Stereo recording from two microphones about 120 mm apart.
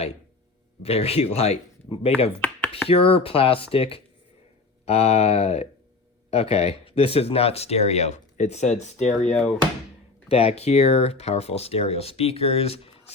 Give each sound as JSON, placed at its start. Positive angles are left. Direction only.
{"t": 0.8, "sound": "speech", "side_deg": 60}
{"t": 2.4, "sound": "a sound", "side_deg": 15}
{"t": 2.9, "sound": "speech", "side_deg": 55}
{"t": 10.2, "sound": "speech", "side_deg": 55}